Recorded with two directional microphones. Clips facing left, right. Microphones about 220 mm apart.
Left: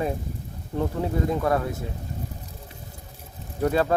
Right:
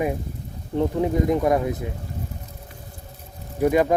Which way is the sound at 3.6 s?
15° right (ahead or behind).